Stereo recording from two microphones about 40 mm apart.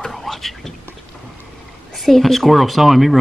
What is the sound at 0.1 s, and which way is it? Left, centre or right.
Whispering, centre.